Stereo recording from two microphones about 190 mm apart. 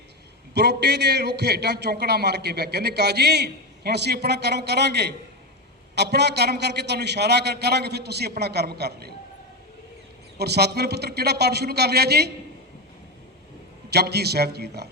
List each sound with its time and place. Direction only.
0.5 s a man's voice: 60° right (ahead or behind)
10.3 s a man's voice: 60° right (ahead or behind)
13.9 s a man's voice: 60° right (ahead or behind)